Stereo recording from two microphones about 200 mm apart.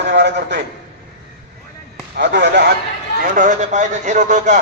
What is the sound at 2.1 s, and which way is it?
Speech, 60° right (ahead or behind).